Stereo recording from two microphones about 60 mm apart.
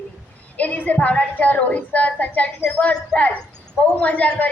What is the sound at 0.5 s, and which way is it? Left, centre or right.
A woman's voice, left.